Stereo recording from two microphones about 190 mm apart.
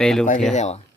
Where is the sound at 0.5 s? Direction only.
35° left (ahead or behind).